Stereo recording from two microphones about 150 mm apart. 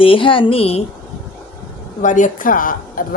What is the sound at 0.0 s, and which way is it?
Speech, 35° left (ahead or behind).